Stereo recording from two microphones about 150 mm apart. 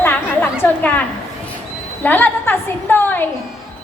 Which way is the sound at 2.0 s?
10° left (ahead or behind).